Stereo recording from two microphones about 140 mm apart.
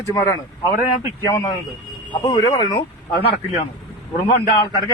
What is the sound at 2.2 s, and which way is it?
Speech, 25° left (ahead or behind).